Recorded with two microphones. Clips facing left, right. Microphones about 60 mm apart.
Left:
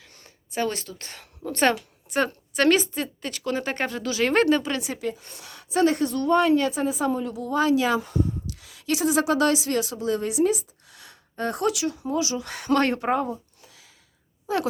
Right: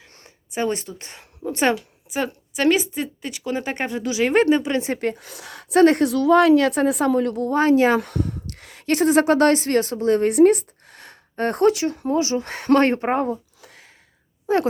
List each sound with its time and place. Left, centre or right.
0.5 s a woman's voice: right
4.8 s speech: right
5.2 s a woman's voice: right
7.4 s speech: right
7.9 s speech: right
14.4 s speech: right